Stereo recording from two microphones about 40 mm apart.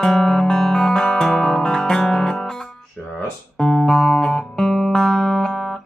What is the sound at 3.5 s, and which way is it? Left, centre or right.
Music, centre.